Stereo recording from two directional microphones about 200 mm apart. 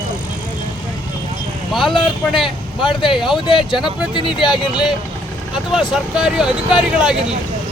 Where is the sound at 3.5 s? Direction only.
25° left (ahead or behind).